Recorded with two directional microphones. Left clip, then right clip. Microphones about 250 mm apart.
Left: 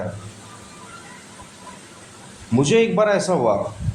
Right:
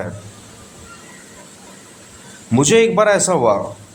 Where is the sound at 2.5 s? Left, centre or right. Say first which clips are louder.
Right 4 dB; right.